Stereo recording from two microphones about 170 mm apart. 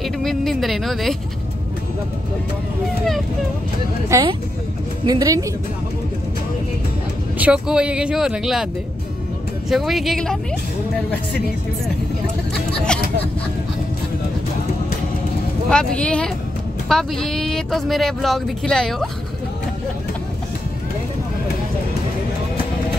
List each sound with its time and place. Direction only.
0.0 s speech: centre (ahead or behind)
4.1 s speech: 15° right (ahead or behind)
7.3 s speech: 5° right (ahead or behind)
9.7 s speech: centre (ahead or behind)
15.7 s speech: 5° left (ahead or behind)